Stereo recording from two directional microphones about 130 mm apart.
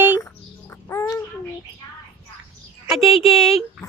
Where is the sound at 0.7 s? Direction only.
20° left (ahead or behind).